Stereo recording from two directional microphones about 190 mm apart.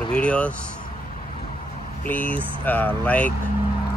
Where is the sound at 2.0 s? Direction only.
10° left (ahead or behind).